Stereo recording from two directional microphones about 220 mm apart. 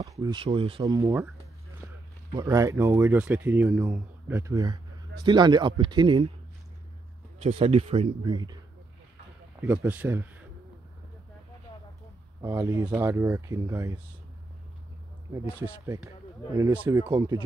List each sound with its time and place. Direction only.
0.0 s speech: 15° right (ahead or behind)
2.3 s speech: 15° right (ahead or behind)
7.4 s speech: 30° right (ahead or behind)
9.6 s speech: 10° right (ahead or behind)
12.4 s speech: 15° right (ahead or behind)
15.6 s speech: 15° right (ahead or behind)
17.0 s speech: 20° right (ahead or behind)